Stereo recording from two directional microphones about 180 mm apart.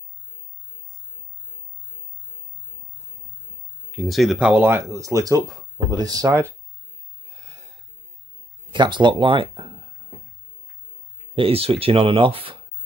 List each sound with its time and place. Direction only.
3.9 s speech: centre (ahead or behind); by 6.4 s 20° right (ahead or behind)
8.7 s speech: 25° right (ahead or behind)
11.3 s speech: 30° right (ahead or behind)